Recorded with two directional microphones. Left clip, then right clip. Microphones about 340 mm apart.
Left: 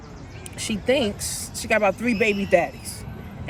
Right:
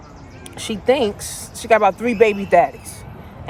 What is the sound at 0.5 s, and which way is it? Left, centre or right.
Speech, centre.